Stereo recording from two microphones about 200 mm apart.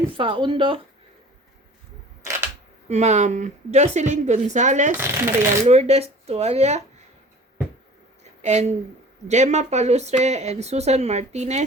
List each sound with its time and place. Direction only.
0.2 s speech: 25° right (ahead or behind)
2.9 s speech: 35° right (ahead or behind)
4.9 s speech: 10° right (ahead or behind)
5.6 s speech: 35° right (ahead or behind)
8.2 s a sound: 35° right (ahead or behind)
9.2 s speech: 35° right (ahead or behind)